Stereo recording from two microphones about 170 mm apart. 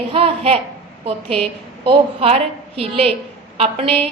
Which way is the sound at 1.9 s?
35° right (ahead or behind).